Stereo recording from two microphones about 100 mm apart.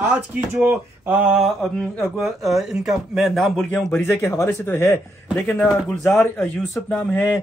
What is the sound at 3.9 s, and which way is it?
A man's voice, 25° left (ahead or behind).